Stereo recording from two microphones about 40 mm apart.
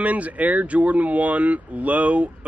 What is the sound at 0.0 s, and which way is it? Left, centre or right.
Speech, right.